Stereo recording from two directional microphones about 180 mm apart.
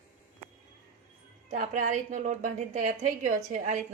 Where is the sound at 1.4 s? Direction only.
45° right (ahead or behind).